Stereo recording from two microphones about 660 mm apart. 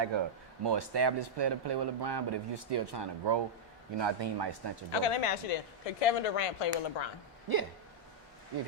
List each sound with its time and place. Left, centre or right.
0.6 s speech: right
4.9 s speech: left
7.5 s speech: right